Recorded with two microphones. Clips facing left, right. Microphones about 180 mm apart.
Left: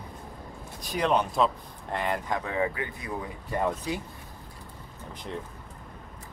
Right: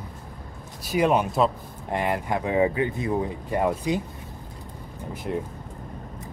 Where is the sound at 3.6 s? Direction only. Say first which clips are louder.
Right 5 dB; 15° right (ahead or behind).